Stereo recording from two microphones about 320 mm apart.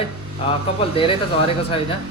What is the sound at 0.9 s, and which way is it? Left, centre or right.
A man's voice, centre.